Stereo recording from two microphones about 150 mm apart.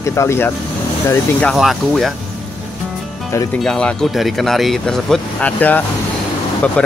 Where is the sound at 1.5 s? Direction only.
Centre (ahead or behind).